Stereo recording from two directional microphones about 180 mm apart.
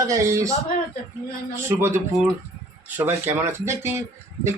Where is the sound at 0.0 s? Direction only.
15° right (ahead or behind).